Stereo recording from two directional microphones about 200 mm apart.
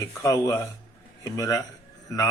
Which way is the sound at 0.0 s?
15° left (ahead or behind).